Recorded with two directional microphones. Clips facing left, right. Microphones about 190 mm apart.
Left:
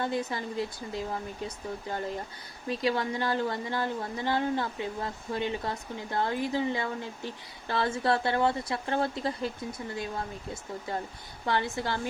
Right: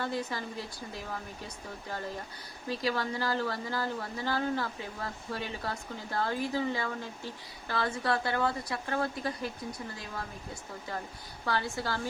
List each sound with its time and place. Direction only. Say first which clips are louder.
0.0 s speech: left 3 dB; 20° left (ahead or behind)
2.6 s speech: left 3 dB; 25° left (ahead or behind)